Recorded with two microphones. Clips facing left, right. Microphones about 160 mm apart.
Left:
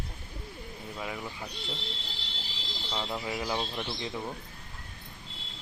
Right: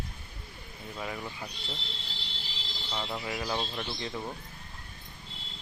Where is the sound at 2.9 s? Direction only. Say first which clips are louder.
Left 1 dB; 5° left (ahead or behind).